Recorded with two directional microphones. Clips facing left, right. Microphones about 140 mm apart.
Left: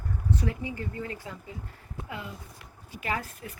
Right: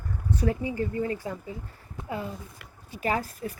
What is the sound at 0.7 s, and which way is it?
Speech, 30° right (ahead or behind).